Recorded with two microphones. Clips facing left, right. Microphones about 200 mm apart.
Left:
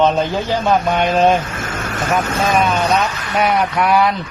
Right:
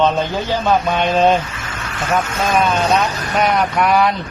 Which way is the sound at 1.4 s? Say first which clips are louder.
Left 4 dB; 50° left (ahead or behind).